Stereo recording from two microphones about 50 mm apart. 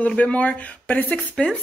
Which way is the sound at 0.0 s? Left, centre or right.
Left.